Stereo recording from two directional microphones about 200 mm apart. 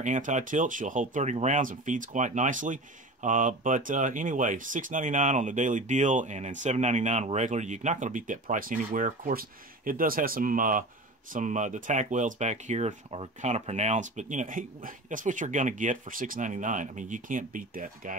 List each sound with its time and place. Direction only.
0.0 s speech: 40° right (ahead or behind)